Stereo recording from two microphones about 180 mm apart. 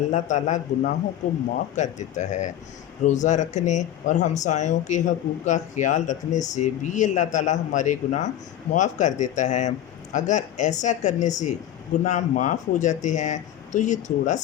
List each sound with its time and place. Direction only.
0.1 s speech: 40° left (ahead or behind)